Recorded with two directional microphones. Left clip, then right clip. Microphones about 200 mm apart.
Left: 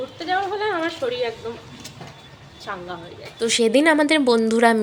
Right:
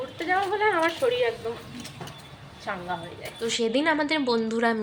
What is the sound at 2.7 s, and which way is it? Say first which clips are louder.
Speech: left 1 dB; 5° left (ahead or behind).